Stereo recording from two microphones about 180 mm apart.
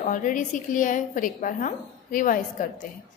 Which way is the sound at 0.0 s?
45° left (ahead or behind).